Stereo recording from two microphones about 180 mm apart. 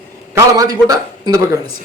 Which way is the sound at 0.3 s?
20° right (ahead or behind).